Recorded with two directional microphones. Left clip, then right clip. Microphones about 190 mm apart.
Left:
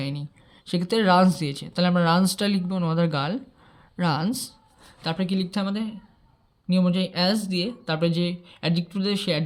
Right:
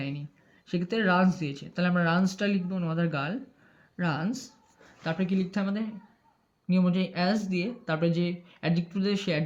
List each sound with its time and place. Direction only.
0.0 s speech: 35° left (ahead or behind)